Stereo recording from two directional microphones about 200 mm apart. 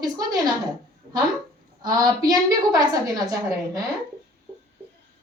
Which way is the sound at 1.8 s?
20° right (ahead or behind).